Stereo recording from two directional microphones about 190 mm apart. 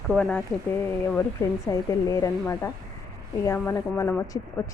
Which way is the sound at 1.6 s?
15° left (ahead or behind).